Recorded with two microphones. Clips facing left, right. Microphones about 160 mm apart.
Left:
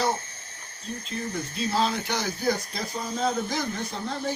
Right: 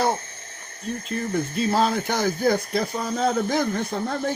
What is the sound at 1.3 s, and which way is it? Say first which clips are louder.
Speech: right 6 dB; 50° right (ahead or behind).